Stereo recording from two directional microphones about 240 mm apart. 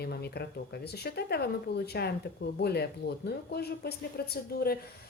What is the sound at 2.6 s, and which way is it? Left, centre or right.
Speech, left.